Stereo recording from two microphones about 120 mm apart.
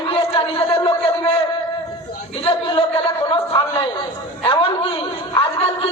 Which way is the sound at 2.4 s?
45° left (ahead or behind).